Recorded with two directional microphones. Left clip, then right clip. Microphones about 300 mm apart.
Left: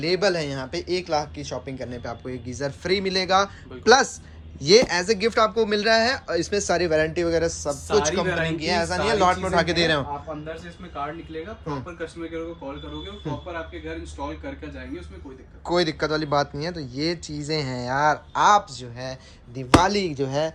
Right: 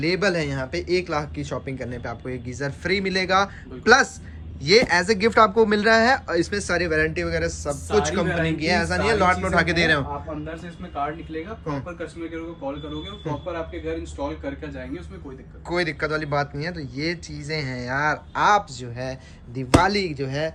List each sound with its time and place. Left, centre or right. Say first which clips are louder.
0.0 s speech: even; centre
13.5 s speech: right 4 dB; centre
15.7 s speech: left 1 dB; centre